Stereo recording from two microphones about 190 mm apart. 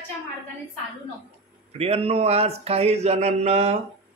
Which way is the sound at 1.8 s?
30° right (ahead or behind).